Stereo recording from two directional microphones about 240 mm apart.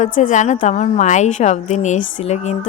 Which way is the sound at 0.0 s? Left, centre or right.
Left.